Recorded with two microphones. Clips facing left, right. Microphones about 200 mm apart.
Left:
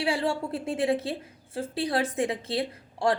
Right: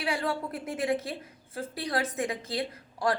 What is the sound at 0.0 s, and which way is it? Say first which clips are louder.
A woman's voice: left 3 dB; 30° left (ahead or behind).